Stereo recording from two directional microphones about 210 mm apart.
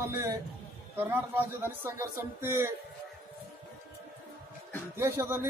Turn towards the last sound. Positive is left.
turn(degrees=-10)  # may be behind; listen again after turning